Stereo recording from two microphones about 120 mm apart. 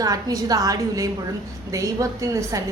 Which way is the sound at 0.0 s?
30° right (ahead or behind).